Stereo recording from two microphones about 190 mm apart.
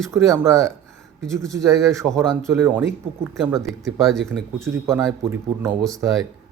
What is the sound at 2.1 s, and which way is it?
Speech, centre (ahead or behind).